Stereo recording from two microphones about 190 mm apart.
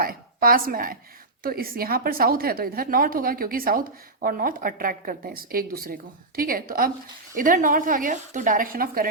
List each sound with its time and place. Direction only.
0.0 s a woman's voice: 50° right (ahead or behind)